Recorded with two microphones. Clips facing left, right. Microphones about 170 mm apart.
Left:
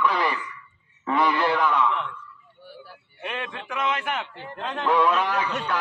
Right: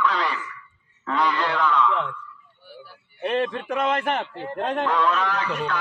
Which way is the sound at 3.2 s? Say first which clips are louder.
Right 9 dB; 35° right (ahead or behind).